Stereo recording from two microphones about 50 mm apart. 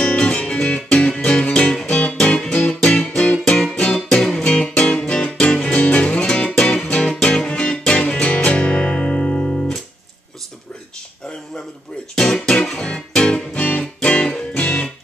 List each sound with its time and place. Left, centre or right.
0.0 s music: left
12.4 s music: centre